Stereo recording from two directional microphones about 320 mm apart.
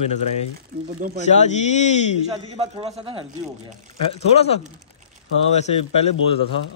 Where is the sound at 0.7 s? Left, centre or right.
Right.